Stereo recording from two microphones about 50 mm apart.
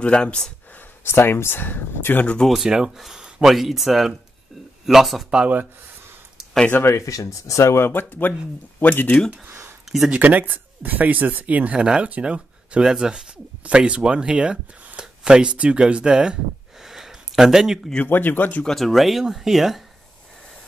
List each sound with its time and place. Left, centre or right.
0.0 s speech: centre
1.0 s speech: left
2.5 s speech: centre
6.9 s speech: left
7.8 s speech: left
10.0 s speech: right
16.8 s a sound: centre
18.0 s speech: left
18.7 s speech: centre